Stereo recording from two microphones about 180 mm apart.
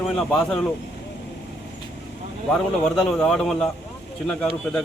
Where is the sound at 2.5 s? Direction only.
5° left (ahead or behind).